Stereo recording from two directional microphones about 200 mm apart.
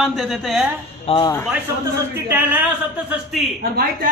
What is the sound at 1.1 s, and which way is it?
Speech, 30° left (ahead or behind).